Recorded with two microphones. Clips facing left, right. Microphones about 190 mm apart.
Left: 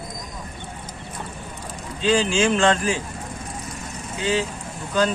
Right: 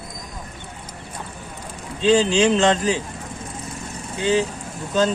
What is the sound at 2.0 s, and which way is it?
Speech, 20° right (ahead or behind).